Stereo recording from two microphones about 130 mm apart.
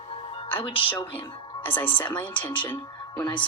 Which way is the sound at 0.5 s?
45° left (ahead or behind).